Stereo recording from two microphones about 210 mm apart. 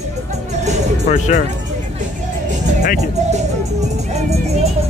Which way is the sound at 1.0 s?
35° left (ahead or behind).